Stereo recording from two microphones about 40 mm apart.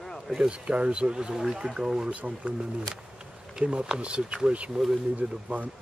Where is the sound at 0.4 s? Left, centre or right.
Right.